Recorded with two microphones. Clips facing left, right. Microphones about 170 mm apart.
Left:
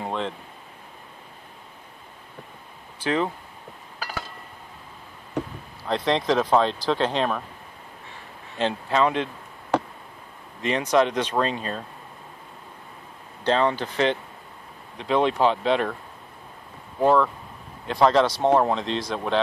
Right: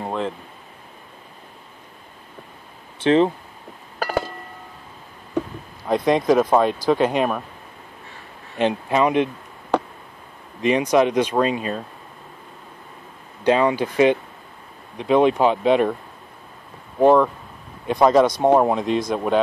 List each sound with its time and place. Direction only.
0.0 s a sound: 5° right (ahead or behind)
3.0 s speech: 25° right (ahead or behind)
5.9 s speech: 10° right (ahead or behind)
8.5 s speech: 15° right (ahead or behind)
10.6 s speech: 15° right (ahead or behind)
13.4 s speech: 10° right (ahead or behind)
15.0 s speech: 15° right (ahead or behind)
17.0 s speech: 15° right (ahead or behind)